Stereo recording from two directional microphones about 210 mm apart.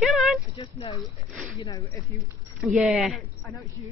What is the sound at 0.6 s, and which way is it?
Speech, 20° left (ahead or behind).